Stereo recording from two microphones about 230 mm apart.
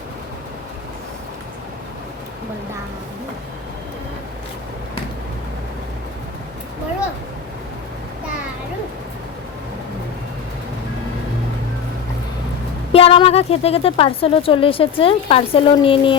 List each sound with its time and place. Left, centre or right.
12.9 s a woman's voice: left